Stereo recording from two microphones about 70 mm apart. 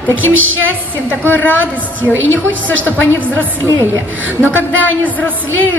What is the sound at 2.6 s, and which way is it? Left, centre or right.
Speech, left.